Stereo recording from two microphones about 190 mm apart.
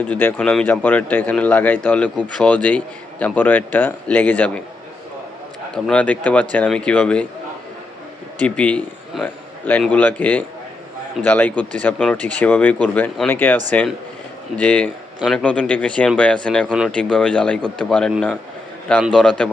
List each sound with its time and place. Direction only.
0.1 s speech: 10° left (ahead or behind)
5.7 s speech: 5° left (ahead or behind)
8.4 s speech: 5° left (ahead or behind)
15.2 s speech: 5° right (ahead or behind)
15.4 s speech: 5° left (ahead or behind)